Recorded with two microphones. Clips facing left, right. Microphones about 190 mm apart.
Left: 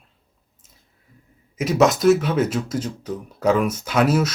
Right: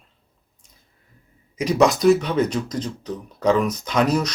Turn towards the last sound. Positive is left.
turn(degrees=5)  # may be behind; listen again after turning